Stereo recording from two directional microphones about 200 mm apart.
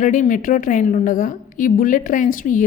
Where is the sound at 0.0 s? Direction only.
40° left (ahead or behind).